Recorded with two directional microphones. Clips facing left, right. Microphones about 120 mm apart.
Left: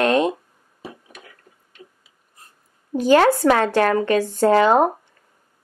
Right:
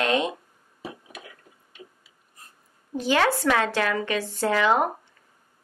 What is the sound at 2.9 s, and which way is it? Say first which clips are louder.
Speech: left 8 dB; 45° left (ahead or behind).